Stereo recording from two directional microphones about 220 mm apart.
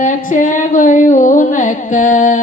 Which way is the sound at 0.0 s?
35° left (ahead or behind).